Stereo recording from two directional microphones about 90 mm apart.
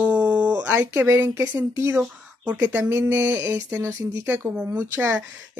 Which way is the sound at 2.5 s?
15° right (ahead or behind).